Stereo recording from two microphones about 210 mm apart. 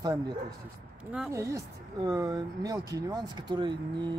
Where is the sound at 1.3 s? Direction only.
15° right (ahead or behind).